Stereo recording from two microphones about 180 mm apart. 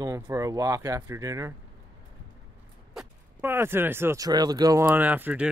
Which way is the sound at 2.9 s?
5° right (ahead or behind).